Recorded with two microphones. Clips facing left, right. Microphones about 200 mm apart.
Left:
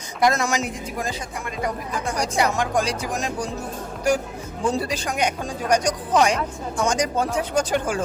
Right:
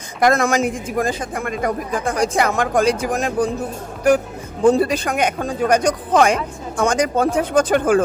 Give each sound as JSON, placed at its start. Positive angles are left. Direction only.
{"t": 0.2, "sound": "speech", "side_deg": -55}
{"t": 4.6, "sound": "speech", "side_deg": -55}